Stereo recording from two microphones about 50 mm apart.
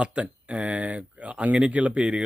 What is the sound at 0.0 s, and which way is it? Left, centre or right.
Speech, right.